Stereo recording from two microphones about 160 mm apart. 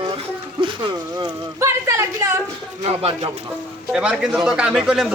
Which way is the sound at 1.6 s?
20° right (ahead or behind).